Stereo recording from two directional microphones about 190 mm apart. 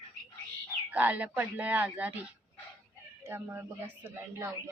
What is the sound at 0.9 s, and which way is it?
A man's voice, 10° right (ahead or behind).